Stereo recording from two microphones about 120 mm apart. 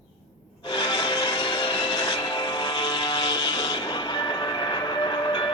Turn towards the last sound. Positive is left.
turn(degrees=40)  # may be behind; listen again after turning